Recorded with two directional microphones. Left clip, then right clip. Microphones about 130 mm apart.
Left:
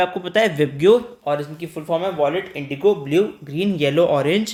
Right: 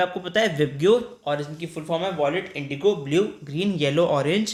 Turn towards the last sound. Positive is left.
turn(degrees=50)  # may be behind; listen again after turning